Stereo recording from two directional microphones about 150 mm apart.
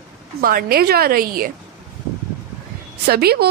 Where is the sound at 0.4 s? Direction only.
75° right (ahead or behind).